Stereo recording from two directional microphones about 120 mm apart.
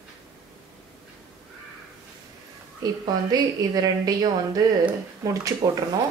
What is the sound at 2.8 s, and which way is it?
A woman's voice, 35° right (ahead or behind).